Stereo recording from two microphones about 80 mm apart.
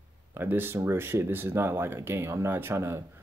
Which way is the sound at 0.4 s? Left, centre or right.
Right.